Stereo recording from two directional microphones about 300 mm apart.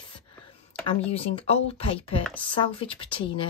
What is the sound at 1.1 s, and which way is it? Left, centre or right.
Speech, centre.